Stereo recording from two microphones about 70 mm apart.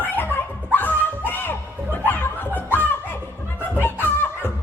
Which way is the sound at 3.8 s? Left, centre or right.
Left.